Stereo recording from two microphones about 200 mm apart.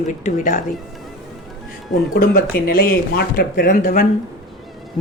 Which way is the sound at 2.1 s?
45° left (ahead or behind).